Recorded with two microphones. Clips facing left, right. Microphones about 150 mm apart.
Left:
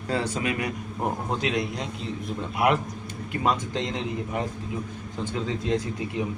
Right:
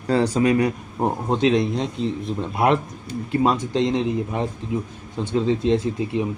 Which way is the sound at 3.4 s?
20° right (ahead or behind).